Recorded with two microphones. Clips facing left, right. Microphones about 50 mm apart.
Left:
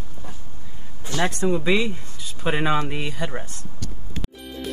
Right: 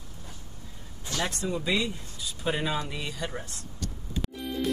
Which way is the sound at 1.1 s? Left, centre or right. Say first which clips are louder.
Left 8 dB; left.